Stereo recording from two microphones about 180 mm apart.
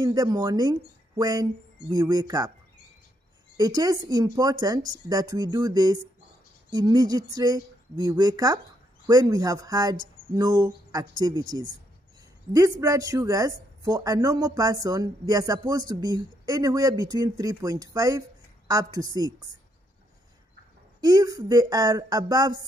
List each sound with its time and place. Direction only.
0.0 s speech: 20° right (ahead or behind)
3.5 s speech: 20° right (ahead or behind)
21.0 s speech: 20° right (ahead or behind)